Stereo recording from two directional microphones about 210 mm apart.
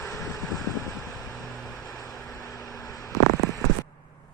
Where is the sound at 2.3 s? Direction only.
15° left (ahead or behind).